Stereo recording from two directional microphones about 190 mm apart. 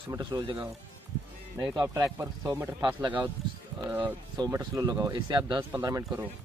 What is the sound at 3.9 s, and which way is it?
Speech, 10° right (ahead or behind).